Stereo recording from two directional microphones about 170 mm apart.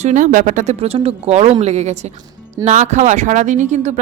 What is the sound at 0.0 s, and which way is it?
Speech, 45° right (ahead or behind).